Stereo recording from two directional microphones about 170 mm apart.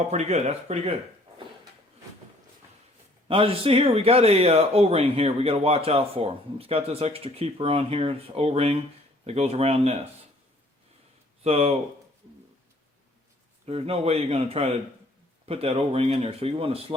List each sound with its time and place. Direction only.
0.1 s speech: 40° right (ahead or behind)
3.2 s speech: 30° right (ahead or behind)
11.4 s speech: 35° right (ahead or behind)
13.7 s speech: 35° right (ahead or behind)